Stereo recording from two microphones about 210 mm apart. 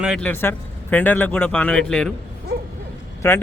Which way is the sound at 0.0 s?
Centre (ahead or behind).